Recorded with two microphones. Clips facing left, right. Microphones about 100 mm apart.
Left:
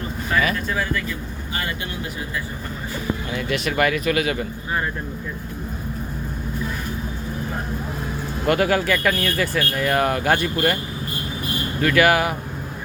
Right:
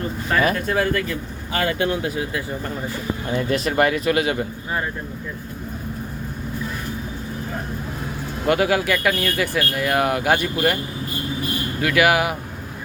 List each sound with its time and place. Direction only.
0.4 s speech: 50° right (ahead or behind)
3.3 s speech: 35° right (ahead or behind)
8.4 s speech: 5° right (ahead or behind)
11.8 s speech: 10° right (ahead or behind)